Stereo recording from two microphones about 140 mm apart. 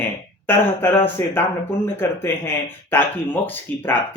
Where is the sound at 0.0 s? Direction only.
15° left (ahead or behind).